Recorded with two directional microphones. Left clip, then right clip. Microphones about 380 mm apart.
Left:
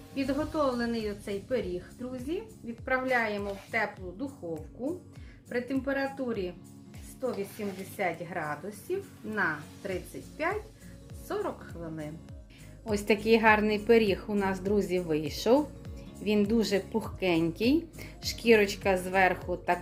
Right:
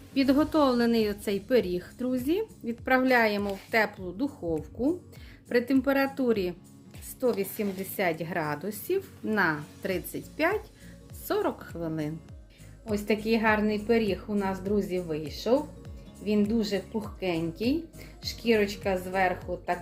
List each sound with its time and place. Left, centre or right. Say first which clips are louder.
0.1 s a woman's voice: right 7 dB; right
5.5 s a woman's voice: right 6 dB; right
7.6 s a woman's voice: right 3 dB; right
12.9 s speech: left 2 dB; centre